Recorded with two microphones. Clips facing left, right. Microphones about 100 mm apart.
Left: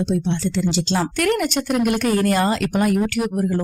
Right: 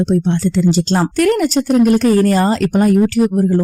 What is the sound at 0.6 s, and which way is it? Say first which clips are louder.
A woman's voice: right 6 dB; 45° right (ahead or behind).